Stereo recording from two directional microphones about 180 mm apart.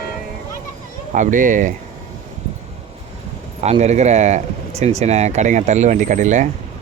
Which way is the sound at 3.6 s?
40° right (ahead or behind).